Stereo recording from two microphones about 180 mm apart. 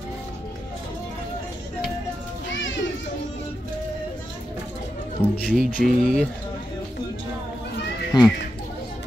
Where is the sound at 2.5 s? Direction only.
90° left.